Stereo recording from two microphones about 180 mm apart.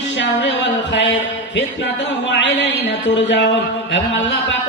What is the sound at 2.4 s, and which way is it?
Speech, 80° left.